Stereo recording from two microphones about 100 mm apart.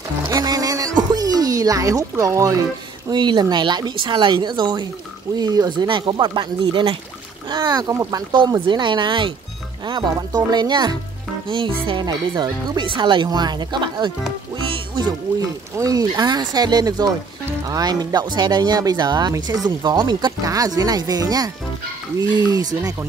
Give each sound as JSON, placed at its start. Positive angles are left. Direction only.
{"t": 0.3, "sound": "music", "side_deg": -35}
{"t": 3.1, "sound": "speech", "side_deg": -50}
{"t": 7.4, "sound": "speech", "side_deg": -40}
{"t": 11.4, "sound": "speech", "side_deg": -55}
{"t": 12.0, "sound": "speech", "side_deg": -45}
{"t": 14.7, "sound": "music", "side_deg": -50}
{"t": 15.7, "sound": "speech", "side_deg": -35}